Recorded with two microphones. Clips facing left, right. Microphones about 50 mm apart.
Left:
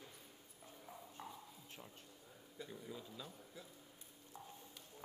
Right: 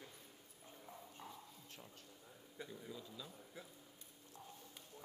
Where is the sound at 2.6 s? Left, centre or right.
Right.